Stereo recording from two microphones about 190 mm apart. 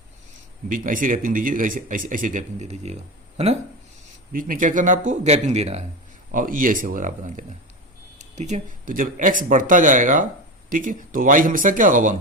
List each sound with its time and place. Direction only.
0.7 s speech: 45° right (ahead or behind)
4.3 s speech: 45° right (ahead or behind)
6.3 s speech: 45° right (ahead or behind)